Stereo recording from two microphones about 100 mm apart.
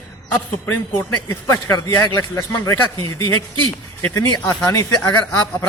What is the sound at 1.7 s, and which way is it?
A man's voice, 30° left (ahead or behind).